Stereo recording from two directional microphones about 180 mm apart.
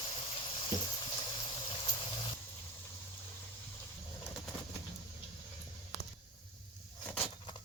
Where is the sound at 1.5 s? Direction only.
25° left (ahead or behind).